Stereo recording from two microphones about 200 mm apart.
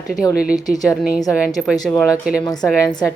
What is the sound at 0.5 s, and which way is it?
Speech, 20° left (ahead or behind).